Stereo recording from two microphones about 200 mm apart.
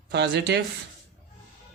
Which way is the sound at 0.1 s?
60° right (ahead or behind).